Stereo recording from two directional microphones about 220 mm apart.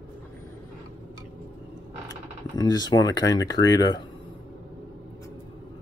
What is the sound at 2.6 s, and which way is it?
Speech, 20° left (ahead or behind).